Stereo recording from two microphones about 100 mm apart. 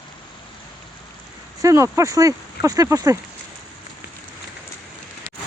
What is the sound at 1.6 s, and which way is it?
Speech, 35° right (ahead or behind).